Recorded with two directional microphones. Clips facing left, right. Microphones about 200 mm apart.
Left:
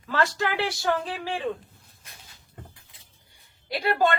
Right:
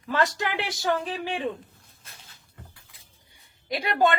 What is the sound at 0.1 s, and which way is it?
Speech, 20° right (ahead or behind).